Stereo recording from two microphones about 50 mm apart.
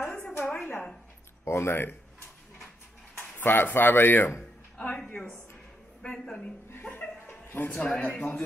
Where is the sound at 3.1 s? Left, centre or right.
Left.